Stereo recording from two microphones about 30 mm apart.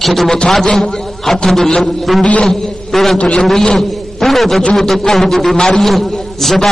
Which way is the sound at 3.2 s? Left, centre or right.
Left.